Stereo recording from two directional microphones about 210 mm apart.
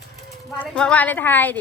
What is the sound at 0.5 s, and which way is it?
A woman's voice, 5° left (ahead or behind).